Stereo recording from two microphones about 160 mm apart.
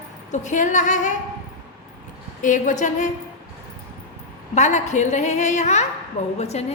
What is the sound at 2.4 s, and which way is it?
Speech, 55° left (ahead or behind).